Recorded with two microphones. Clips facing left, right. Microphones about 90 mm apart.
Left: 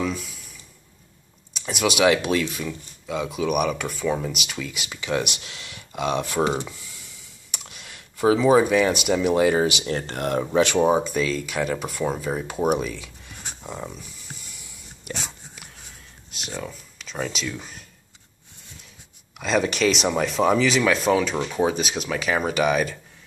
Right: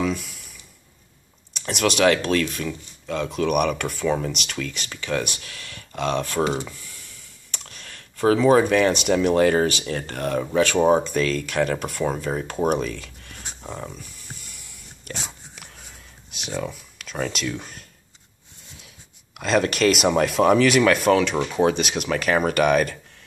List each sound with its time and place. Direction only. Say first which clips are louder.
0.0 s a sound: right 2 dB; centre (ahead or behind)
1.5 s speech: right 1 dB; 5° left (ahead or behind)
9.8 s speech: left 1 dB; 30° left (ahead or behind)
10.8 s speech: right 1 dB; 5° left (ahead or behind)
19.3 s speech: right 2 dB; centre (ahead or behind)